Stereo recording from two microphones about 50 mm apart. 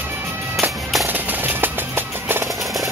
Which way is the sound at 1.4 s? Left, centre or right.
Right.